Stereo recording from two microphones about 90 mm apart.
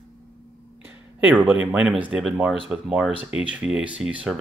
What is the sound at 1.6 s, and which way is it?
Speech, 15° right (ahead or behind).